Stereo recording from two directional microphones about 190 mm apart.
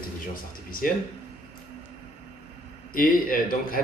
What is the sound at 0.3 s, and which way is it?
Speech, 50° left (ahead or behind).